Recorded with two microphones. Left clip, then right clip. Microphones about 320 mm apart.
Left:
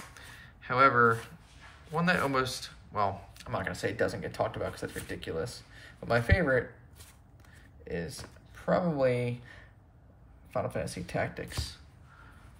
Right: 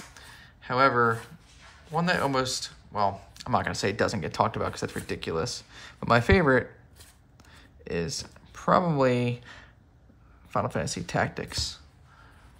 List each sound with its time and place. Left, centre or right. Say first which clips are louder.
0.1 s a sound: right 1 dB; centre
1.9 s speech: right 3 dB; centre
7.8 s speech: right 6 dB; centre
10.7 s speech: right 5 dB; centre